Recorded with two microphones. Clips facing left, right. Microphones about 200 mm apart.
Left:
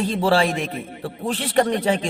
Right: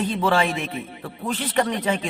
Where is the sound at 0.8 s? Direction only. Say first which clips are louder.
Left 2 dB; 45° left (ahead or behind).